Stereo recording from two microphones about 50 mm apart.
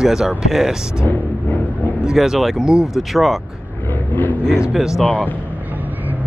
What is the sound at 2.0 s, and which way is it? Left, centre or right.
Speech, centre.